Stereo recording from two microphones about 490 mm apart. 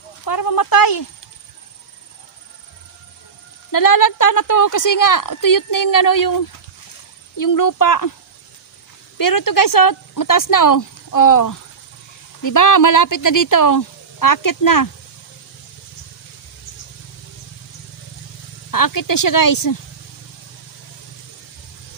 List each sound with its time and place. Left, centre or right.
0.3 s speech: left
3.7 s a woman's voice: left
9.1 s a woman's voice: left
18.7 s a woman's voice: left